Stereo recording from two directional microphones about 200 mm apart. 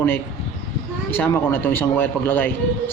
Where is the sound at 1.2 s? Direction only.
10° left (ahead or behind).